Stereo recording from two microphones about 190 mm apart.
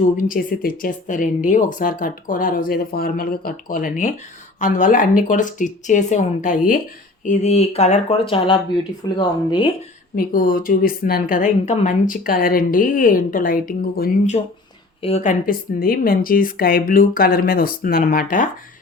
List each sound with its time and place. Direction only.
0.2 s speech: 45° left (ahead or behind); by 9.6 s 25° left (ahead or behind)
10.2 s speech: 45° left (ahead or behind)
15.0 s speech: 35° left (ahead or behind)